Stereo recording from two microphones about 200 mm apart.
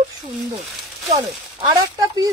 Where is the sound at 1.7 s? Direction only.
20° right (ahead or behind).